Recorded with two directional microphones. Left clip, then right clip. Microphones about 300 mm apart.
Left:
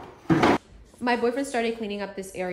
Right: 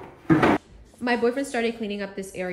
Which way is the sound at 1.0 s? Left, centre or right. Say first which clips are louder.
Right 1 dB; centre.